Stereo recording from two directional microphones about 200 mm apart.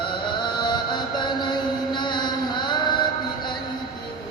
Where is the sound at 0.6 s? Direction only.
20° left (ahead or behind).